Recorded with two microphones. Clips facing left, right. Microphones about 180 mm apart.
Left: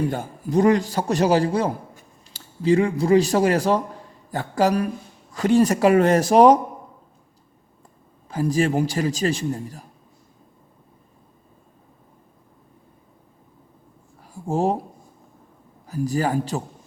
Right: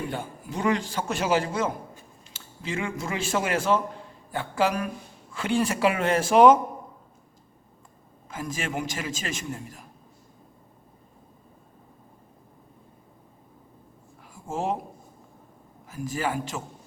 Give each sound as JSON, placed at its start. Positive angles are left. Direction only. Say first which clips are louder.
{"t": 0.1, "sound": "a man's voice", "louder": "left 9 dB", "side_deg": 40}
{"t": 8.3, "sound": "a man's voice", "louder": "left 11 dB", "side_deg": 35}
{"t": 14.3, "sound": "speech", "louder": "left 7 dB", "side_deg": 35}
{"t": 15.9, "sound": "a man's voice", "louder": "left 7 dB", "side_deg": 35}